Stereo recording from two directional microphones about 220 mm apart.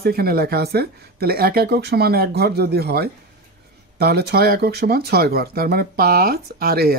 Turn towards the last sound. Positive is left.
turn(degrees=-45)  # may be behind; listen again after turning